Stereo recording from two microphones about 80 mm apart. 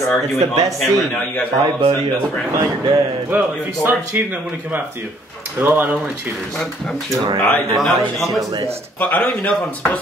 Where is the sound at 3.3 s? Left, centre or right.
Right.